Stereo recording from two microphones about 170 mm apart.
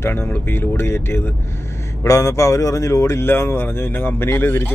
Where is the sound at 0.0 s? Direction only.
15° left (ahead or behind).